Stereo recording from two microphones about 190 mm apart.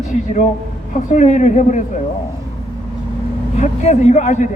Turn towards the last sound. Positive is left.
turn(degrees=40)  # may be behind; listen again after turning